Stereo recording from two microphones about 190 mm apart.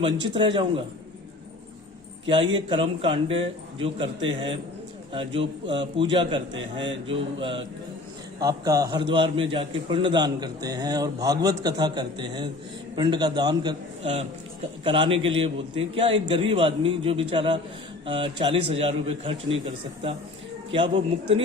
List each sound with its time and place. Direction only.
0.0 s a man's voice: 25° right (ahead or behind)
2.2 s a man's voice: 25° right (ahead or behind)
20.7 s a man's voice: 25° right (ahead or behind)